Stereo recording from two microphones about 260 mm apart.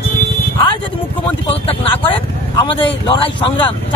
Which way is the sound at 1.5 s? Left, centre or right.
Left.